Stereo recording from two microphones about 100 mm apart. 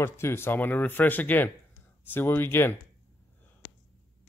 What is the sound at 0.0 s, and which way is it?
Speech, 25° left (ahead or behind).